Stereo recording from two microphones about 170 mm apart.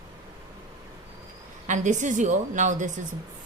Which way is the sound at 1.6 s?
45° right (ahead or behind).